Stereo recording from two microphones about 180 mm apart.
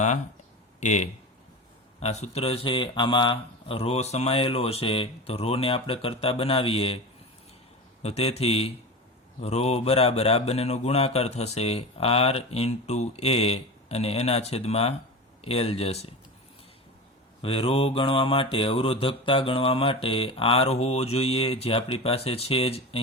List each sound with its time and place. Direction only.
0.8 s speech: 40° left (ahead or behind)
8.0 s speech: 35° left (ahead or behind)
17.4 s speech: 30° left (ahead or behind)